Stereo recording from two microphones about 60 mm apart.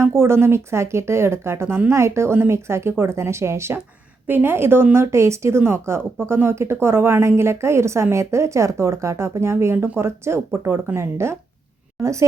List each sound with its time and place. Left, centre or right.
0.0 s speech: right
4.3 s speech: right
5.1 s speech: right
12.0 s a woman's voice: centre